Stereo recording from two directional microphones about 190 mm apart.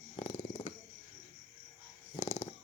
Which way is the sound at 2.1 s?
30° left (ahead or behind).